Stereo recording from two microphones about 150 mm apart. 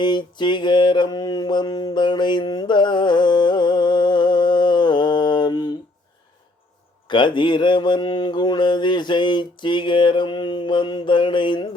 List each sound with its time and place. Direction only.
0.0 s mantra: 30° left (ahead or behind)
7.1 s mantra: 30° left (ahead or behind)